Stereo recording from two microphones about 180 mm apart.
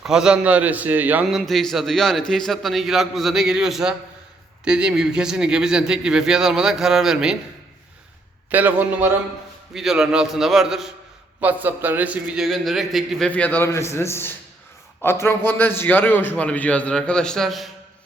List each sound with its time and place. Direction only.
0.0 s a man's voice: 5° right (ahead or behind)
1.4 s a man's voice: centre (ahead or behind)
8.4 s a man's voice: 10° right (ahead or behind)